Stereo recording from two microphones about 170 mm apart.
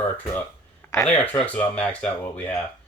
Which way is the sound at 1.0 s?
10° left (ahead or behind).